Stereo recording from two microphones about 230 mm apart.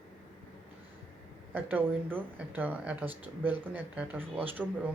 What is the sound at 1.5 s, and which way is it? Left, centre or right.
Speech, centre.